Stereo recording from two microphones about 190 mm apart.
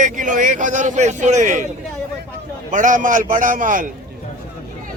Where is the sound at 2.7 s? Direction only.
40° right (ahead or behind).